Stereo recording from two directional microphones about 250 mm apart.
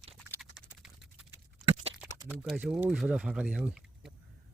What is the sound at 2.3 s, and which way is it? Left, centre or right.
Speech, centre.